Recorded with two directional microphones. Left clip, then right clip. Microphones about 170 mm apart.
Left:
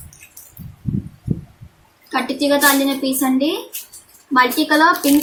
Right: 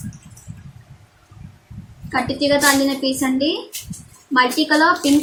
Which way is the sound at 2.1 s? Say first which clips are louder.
Even; 20° left (ahead or behind).